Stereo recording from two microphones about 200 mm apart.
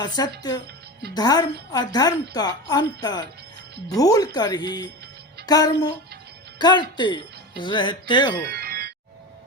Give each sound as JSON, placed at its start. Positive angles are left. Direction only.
{"t": 0.0, "sound": "speech", "side_deg": 20}
{"t": 8.4, "sound": "music", "side_deg": -50}